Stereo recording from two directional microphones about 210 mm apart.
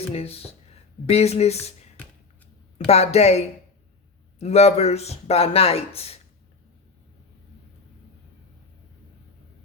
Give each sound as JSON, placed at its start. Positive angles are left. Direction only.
{"t": 0.1, "sound": "speech", "side_deg": 30}
{"t": 2.0, "sound": "a sound", "side_deg": 10}
{"t": 2.7, "sound": "speech", "side_deg": 30}